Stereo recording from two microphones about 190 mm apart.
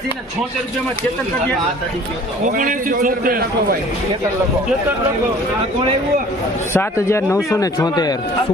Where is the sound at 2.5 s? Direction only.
45° right (ahead or behind).